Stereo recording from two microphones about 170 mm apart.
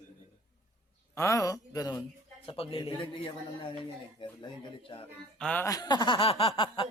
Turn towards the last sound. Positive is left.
turn(degrees=30)  # may be behind; listen again after turning